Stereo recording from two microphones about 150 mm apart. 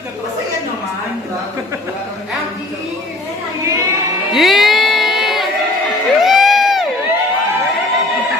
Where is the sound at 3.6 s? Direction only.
20° right (ahead or behind).